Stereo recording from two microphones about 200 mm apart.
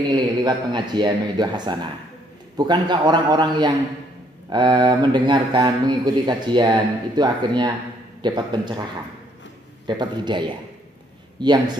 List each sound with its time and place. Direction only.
0.1 s speech: 20° right (ahead or behind)
9.8 s a man's voice: 20° right (ahead or behind)